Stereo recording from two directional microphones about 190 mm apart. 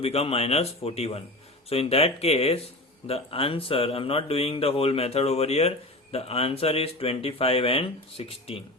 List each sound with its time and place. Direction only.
0.0 s speech: 30° left (ahead or behind)